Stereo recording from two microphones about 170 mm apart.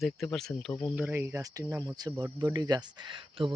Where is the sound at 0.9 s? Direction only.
10° right (ahead or behind).